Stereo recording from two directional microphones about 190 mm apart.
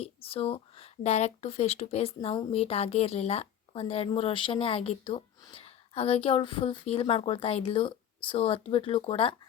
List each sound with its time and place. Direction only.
0.0 s speech: 30° left (ahead or behind)